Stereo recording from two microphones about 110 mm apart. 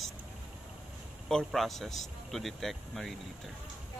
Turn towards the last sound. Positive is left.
turn(degrees=0)  # may be behind; listen again after turning